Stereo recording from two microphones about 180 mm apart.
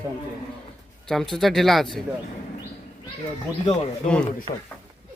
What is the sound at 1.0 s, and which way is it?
Speech, centre (ahead or behind).